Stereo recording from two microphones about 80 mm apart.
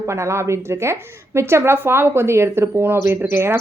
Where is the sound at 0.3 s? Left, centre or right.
Right.